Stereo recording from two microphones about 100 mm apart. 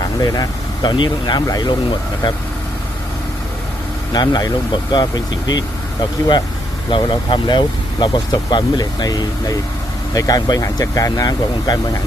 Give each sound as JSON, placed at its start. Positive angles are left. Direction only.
{"t": 0.2, "sound": "speech", "side_deg": 40}
{"t": 4.1, "sound": "speech", "side_deg": 45}
{"t": 6.9, "sound": "speech", "side_deg": 55}